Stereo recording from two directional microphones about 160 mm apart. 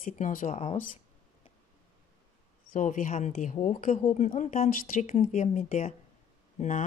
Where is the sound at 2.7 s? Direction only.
55° left (ahead or behind).